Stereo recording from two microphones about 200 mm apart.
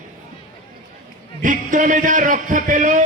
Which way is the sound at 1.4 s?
40° right (ahead or behind).